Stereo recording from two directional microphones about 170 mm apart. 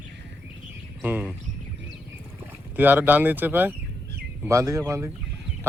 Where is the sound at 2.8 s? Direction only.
10° right (ahead or behind).